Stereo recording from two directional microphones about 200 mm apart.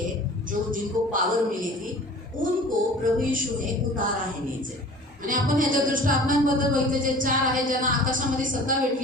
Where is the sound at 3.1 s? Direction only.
40° right (ahead or behind).